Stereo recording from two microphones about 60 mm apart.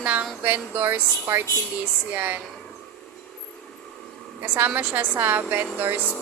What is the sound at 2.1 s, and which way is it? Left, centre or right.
Speech, right.